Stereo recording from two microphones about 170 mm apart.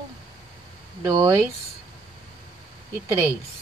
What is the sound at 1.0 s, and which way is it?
Speech, 20° right (ahead or behind).